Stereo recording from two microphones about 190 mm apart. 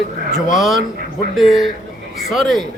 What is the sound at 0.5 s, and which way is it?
A man's voice, centre (ahead or behind).